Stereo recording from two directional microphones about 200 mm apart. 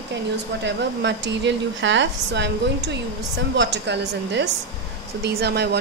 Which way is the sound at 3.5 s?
60° right (ahead or behind).